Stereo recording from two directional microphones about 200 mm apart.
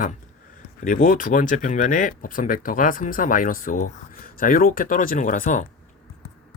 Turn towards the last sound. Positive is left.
turn(degrees=40)  # may be behind; listen again after turning